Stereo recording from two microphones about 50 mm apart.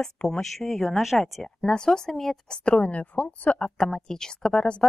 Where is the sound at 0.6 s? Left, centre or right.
Centre.